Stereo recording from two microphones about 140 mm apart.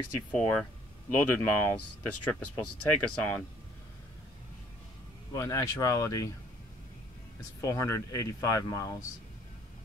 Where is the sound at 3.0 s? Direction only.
10° left (ahead or behind).